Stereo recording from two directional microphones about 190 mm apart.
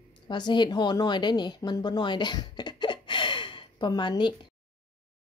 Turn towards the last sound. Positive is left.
turn(degrees=25)  # may be behind; listen again after turning